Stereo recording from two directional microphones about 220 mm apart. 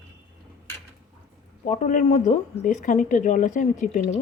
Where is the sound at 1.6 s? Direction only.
35° left (ahead or behind).